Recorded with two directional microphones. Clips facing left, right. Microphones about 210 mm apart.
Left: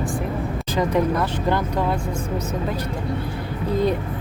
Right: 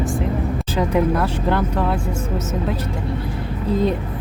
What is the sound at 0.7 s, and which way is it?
Speech, 5° right (ahead or behind).